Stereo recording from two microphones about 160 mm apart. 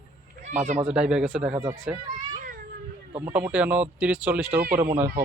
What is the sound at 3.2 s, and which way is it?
Speech, 10° right (ahead or behind).